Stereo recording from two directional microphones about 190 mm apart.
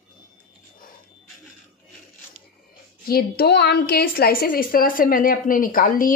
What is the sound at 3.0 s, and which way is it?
A woman's voice, 55° left (ahead or behind).